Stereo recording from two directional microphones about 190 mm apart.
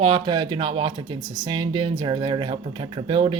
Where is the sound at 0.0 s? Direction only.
25° right (ahead or behind).